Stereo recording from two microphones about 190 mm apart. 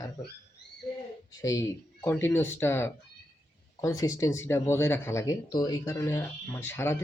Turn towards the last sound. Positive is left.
turn(degrees=15)  # may be behind; listen again after turning